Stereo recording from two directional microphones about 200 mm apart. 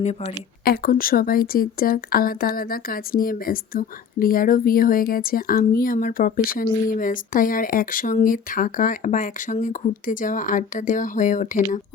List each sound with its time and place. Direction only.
0.6 s speech: 50° left (ahead or behind)